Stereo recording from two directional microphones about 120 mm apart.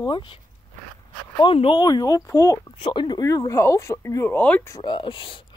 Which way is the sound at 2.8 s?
40° left (ahead or behind).